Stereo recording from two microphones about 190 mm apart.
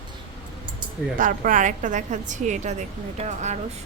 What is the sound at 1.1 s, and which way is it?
A woman's voice, 45° right (ahead or behind).